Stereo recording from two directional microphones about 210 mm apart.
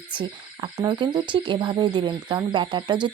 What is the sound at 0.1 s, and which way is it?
Speech, 20° right (ahead or behind).